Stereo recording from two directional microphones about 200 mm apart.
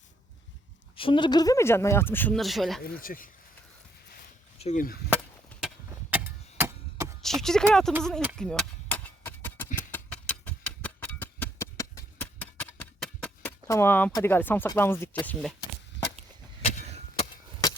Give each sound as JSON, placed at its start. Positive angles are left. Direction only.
{"t": 0.9, "sound": "speech", "side_deg": 25}
{"t": 2.8, "sound": "speech", "side_deg": 45}
{"t": 4.5, "sound": "speech", "side_deg": 35}
{"t": 5.6, "sound": "wood", "side_deg": -10}
{"t": 7.2, "sound": "speech", "side_deg": 0}
{"t": 8.4, "sound": "a sound", "side_deg": 5}
{"t": 13.7, "sound": "speech", "side_deg": 15}